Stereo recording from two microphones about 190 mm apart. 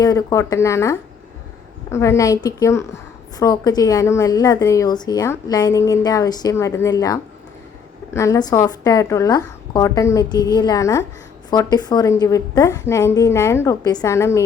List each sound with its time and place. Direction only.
0.0 s a woman's voice: 20° left (ahead or behind)